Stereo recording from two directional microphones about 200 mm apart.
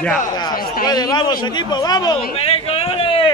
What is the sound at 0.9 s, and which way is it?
Speech, 20° left (ahead or behind).